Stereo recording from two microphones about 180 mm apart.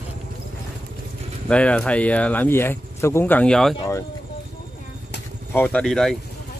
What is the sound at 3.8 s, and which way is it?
Speech, 15° left (ahead or behind).